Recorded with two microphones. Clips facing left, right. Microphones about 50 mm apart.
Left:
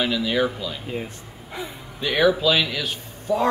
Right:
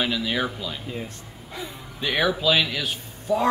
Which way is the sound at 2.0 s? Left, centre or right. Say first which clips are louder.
Left 4 dB; centre.